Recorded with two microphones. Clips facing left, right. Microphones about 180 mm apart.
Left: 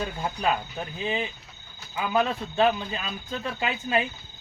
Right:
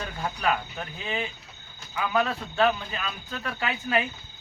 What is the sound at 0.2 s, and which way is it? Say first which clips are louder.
Speech: right 2 dB; 20° left (ahead or behind).